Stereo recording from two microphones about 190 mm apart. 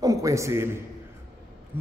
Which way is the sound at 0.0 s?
20° right (ahead or behind).